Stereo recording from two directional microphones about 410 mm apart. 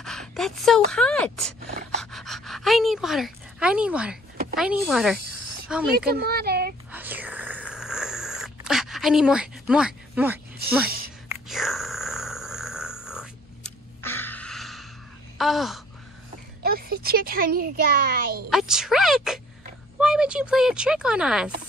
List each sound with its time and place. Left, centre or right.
0.0 s speech: centre
2.0 s pant: centre
4.5 s speech: centre
6.1 s speech: right
6.9 s whispering: centre
11.3 s a sound: centre
15.4 s speech: centre
16.6 s speech: right
18.5 s speech: centre